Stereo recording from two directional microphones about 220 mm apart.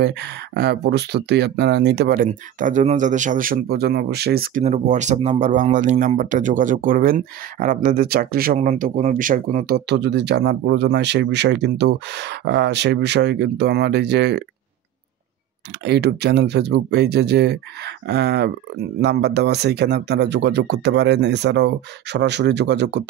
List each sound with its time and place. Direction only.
0.0 s speech: 50° right (ahead or behind)
4.6 s speech: 30° right (ahead or behind); by 14.4 s 50° right (ahead or behind)
15.8 s speech: 50° right (ahead or behind)